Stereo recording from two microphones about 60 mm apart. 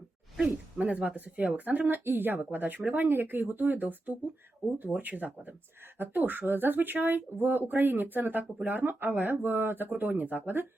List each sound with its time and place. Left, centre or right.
0.4 s speech: right